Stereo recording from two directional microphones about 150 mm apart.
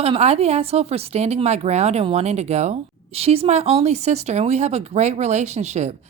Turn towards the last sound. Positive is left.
turn(degrees=-50)  # may be behind; listen again after turning